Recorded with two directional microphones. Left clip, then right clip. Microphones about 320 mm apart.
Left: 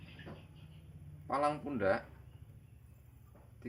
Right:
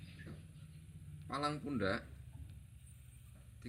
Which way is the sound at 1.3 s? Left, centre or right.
Centre.